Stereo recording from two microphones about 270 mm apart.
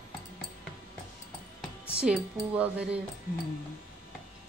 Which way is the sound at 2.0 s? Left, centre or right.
Centre.